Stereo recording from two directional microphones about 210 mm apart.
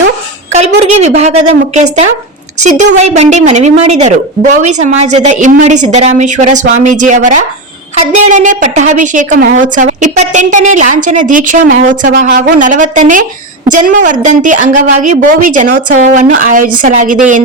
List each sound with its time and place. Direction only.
0.8 s a woman's voice: 30° right (ahead or behind)